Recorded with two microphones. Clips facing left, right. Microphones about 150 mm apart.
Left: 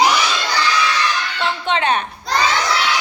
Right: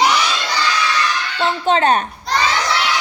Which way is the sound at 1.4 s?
40° right (ahead or behind).